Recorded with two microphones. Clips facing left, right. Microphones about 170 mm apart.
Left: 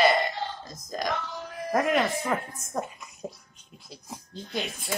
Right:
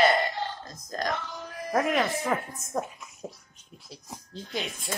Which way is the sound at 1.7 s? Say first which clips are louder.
Left 1 dB; centre (ahead or behind).